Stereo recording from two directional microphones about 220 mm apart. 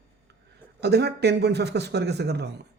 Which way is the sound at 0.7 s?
50° right (ahead or behind).